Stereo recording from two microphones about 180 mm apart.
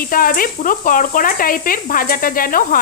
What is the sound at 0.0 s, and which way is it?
Speech, 50° left (ahead or behind).